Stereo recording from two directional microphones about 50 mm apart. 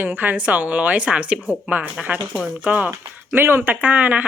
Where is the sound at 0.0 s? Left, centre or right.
Right.